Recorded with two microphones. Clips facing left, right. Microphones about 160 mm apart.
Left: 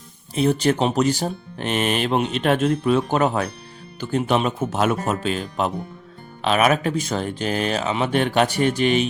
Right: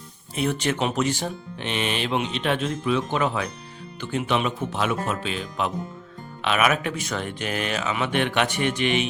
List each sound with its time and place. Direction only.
0.3 s speech: 35° left (ahead or behind)